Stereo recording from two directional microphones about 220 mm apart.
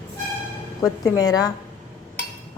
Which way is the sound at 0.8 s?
15° left (ahead or behind).